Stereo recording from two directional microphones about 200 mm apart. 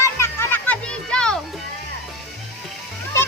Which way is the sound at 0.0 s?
15° left (ahead or behind).